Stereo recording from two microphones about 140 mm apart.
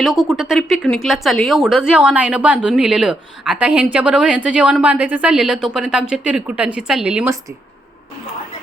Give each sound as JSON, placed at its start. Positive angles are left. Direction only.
{"t": 0.0, "sound": "a woman's voice", "side_deg": 0}